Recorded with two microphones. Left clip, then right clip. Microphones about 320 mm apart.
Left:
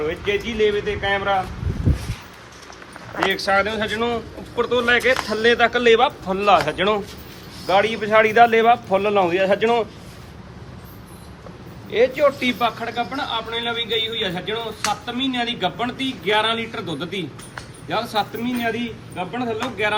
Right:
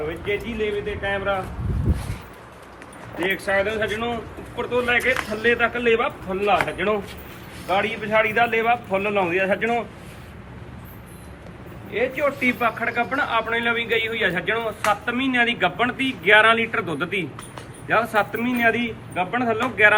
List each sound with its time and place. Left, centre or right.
0.3 s speech: left
3.4 s speech: left
11.9 s speech: left
12.8 s a man's voice: centre